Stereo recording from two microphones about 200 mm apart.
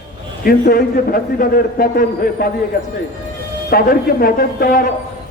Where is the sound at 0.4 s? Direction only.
50° left (ahead or behind).